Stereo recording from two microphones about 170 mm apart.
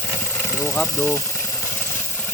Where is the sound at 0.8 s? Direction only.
15° left (ahead or behind).